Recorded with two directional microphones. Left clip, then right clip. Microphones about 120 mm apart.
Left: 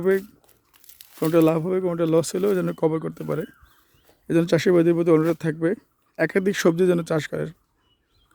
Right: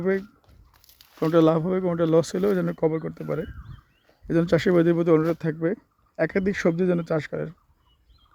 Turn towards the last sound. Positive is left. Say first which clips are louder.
# left 2 dB
turn(degrees=30)  # may be behind; listen again after turning